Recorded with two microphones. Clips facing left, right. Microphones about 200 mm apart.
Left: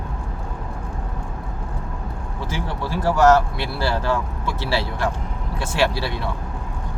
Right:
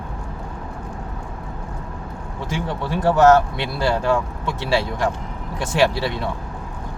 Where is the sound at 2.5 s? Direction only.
20° right (ahead or behind).